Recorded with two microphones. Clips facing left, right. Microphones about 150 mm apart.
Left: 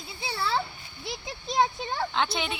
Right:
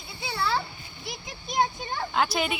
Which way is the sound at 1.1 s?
25° left (ahead or behind).